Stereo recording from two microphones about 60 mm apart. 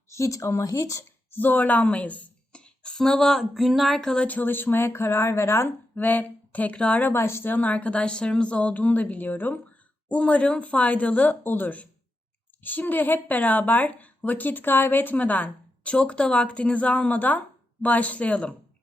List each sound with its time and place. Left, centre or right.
0.1 s speech: left
1.3 s speech: left; by 4.1 s centre
4.3 s speech: left
5.9 s speech: left
7.0 s speech: left
7.5 s a woman's voice: left